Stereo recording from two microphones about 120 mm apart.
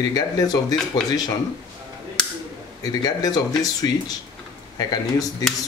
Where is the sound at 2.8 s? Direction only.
30° left (ahead or behind).